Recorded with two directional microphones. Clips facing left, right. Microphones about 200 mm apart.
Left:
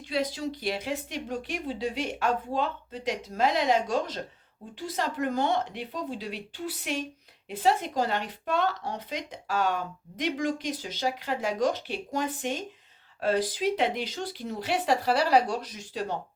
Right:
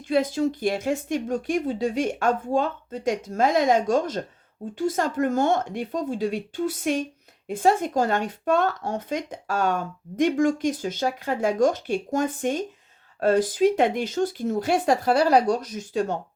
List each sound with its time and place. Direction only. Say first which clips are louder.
0.0 s speech: right 8 dB; 50° right (ahead or behind)